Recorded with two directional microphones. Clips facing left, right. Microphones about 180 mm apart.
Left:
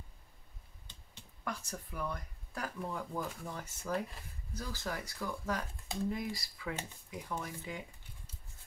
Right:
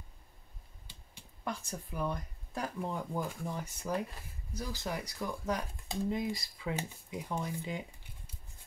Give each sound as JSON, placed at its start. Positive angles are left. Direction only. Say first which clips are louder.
{"t": 1.4, "sound": "speech", "louder": "right 2 dB", "side_deg": -25}